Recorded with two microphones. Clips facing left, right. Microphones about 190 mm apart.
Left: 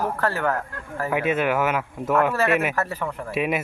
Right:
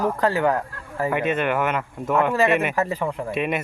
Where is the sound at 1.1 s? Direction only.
5° left (ahead or behind).